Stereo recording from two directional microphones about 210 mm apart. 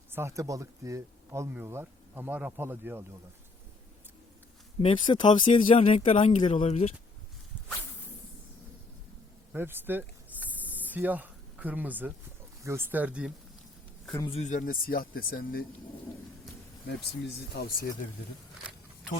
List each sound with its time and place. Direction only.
0.1 s speech: 10° right (ahead or behind)
4.8 s speech: 25° left (ahead or behind)
9.5 s speech: 10° right (ahead or behind)
10.4 s a sound: 10° right (ahead or behind)
12.6 s speech: 10° right (ahead or behind)
14.2 s speech: 25° left (ahead or behind); by 15.6 s 45° left (ahead or behind)
17.5 s speech: 45° left (ahead or behind)